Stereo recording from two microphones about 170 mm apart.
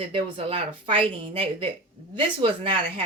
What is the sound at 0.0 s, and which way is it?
Speech, 30° right (ahead or behind).